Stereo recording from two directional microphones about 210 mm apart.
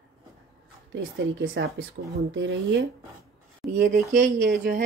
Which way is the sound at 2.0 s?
50° right (ahead or behind).